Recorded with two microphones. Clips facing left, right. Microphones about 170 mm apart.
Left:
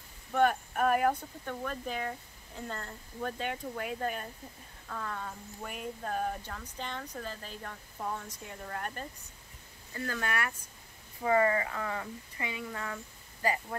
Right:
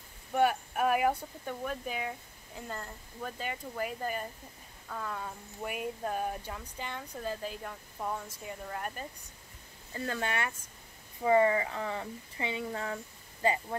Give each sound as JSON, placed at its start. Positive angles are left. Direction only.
{"t": 0.3, "sound": "speech", "side_deg": -10}
{"t": 9.9, "sound": "speech", "side_deg": -25}